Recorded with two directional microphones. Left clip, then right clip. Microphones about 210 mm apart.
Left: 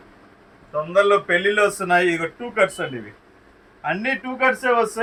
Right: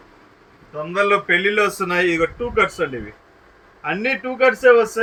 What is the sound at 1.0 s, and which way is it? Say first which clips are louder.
Speech: right 1 dB; 20° left (ahead or behind).